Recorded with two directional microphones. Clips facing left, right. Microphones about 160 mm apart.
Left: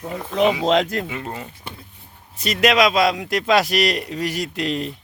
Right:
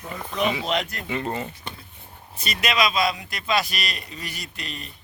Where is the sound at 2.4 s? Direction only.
90° left.